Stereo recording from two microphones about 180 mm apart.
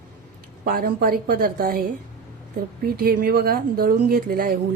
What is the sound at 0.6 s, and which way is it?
Speech, 55° right (ahead or behind).